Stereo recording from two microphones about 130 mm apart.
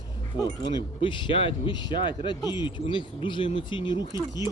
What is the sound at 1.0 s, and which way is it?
Speech, 40° left (ahead or behind).